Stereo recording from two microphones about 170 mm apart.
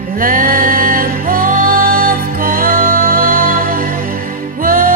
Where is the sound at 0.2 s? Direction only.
55° right (ahead or behind).